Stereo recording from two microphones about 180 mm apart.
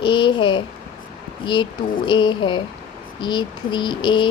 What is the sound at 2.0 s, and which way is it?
Speech, 25° left (ahead or behind).